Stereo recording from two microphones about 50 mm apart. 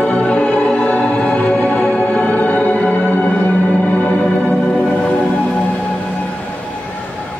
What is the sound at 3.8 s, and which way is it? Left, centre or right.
Music, left.